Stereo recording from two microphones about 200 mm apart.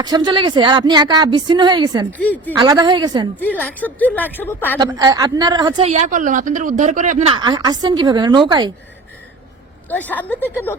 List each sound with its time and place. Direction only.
0.0 s speech: 20° right (ahead or behind)
2.0 s speech: 10° left (ahead or behind)
2.6 s speech: 20° right (ahead or behind)
3.4 s speech: 10° left (ahead or behind)
4.8 s speech: 20° right (ahead or behind)
5.7 s speech: 35° right (ahead or behind)
7.3 s speech: 20° right (ahead or behind)
9.9 s speech: 10° left (ahead or behind)